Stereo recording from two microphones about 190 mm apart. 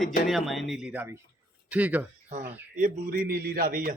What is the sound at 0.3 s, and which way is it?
Speech, centre (ahead or behind).